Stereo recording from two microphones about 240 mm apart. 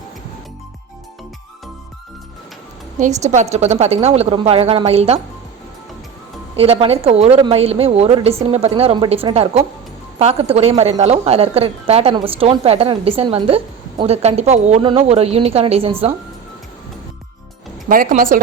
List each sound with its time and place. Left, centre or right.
3.0 s a woman's voice: right
6.6 s a woman's voice: right
17.8 s speech: right